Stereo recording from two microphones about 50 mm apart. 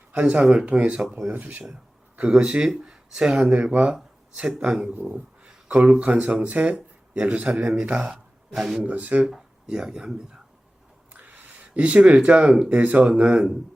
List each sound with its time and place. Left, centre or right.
0.1 s speech: right
2.4 s speech: centre
4.4 s speech: centre
5.6 s speech: right; by 8.8 s centre
8.8 s speech: right
9.2 s speech: centre
11.1 s a sound: right
13.0 s speech: centre